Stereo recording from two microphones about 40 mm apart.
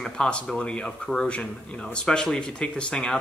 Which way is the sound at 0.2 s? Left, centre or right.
Centre.